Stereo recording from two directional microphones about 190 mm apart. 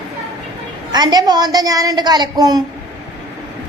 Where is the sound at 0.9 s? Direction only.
20° right (ahead or behind).